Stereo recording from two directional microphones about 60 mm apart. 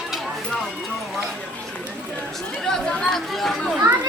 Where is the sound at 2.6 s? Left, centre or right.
Centre.